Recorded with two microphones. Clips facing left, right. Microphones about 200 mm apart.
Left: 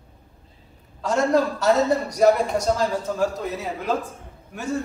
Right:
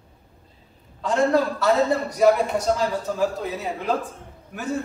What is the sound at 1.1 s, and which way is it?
A man's voice, 45° left (ahead or behind).